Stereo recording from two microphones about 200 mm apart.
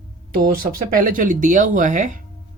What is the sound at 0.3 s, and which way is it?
Speech, 45° right (ahead or behind).